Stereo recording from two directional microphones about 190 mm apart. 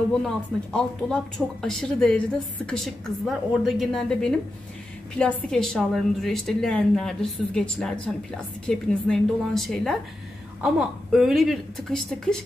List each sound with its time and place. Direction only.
0.2 s speech: 5° left (ahead or behind)